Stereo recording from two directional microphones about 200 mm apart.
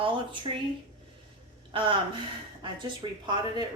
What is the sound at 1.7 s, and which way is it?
A woman's voice, 25° right (ahead or behind).